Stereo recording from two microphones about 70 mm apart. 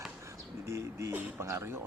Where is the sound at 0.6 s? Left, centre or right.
Right.